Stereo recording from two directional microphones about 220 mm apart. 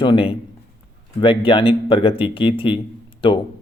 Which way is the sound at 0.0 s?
25° left (ahead or behind).